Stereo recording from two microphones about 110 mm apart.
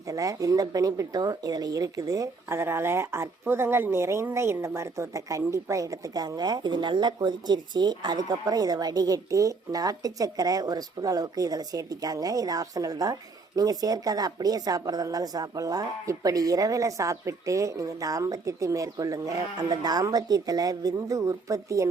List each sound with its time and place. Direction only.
0.1 s speech: 30° right (ahead or behind)